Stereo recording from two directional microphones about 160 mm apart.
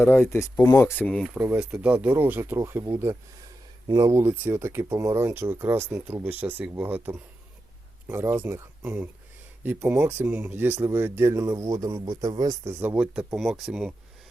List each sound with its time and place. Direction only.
0.0 s speech: 15° left (ahead or behind)
1.3 s speech: 10° right (ahead or behind)
12.8 s speech: 10° right (ahead or behind)